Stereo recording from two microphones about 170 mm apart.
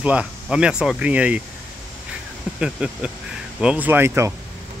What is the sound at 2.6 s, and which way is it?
Speech, 5° right (ahead or behind).